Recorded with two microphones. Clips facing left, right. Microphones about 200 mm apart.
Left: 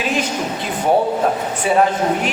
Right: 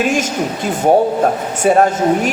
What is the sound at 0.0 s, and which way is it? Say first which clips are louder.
Speech: right 4 dB; 45° right (ahead or behind).